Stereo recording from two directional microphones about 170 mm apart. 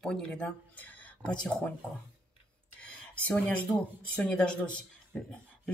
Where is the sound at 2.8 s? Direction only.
10° left (ahead or behind).